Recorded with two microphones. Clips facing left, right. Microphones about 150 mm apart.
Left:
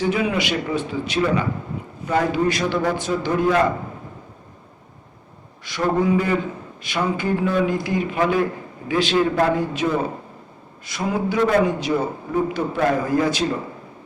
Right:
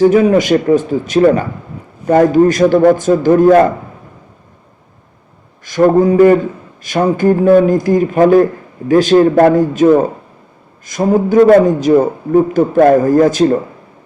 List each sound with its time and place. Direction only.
0.0 s a man's voice: 45° right (ahead or behind)
5.6 s a man's voice: 45° right (ahead or behind)